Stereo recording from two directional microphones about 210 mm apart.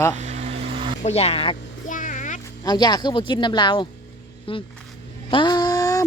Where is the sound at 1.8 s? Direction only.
40° left (ahead or behind).